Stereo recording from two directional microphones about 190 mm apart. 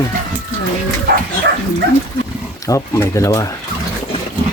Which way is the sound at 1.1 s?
60° right (ahead or behind).